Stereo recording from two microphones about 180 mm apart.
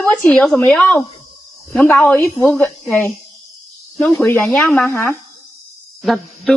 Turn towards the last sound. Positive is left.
turn(degrees=0)  # may be behind; listen again after turning